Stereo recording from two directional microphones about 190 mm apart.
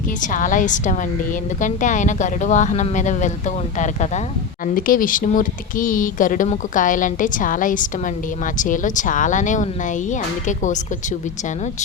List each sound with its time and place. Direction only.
0.2 s speech: 45° left (ahead or behind)